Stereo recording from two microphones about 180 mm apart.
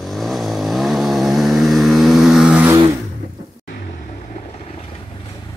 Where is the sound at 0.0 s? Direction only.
Centre (ahead or behind).